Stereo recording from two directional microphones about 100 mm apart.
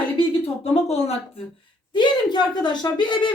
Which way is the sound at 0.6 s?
90° left.